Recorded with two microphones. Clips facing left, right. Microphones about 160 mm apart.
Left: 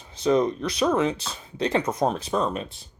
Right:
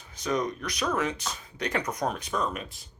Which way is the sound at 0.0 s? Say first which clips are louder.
Left 8 dB; 30° left (ahead or behind).